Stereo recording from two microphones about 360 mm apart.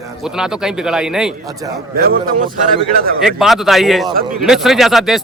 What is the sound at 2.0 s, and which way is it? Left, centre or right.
Speech, right.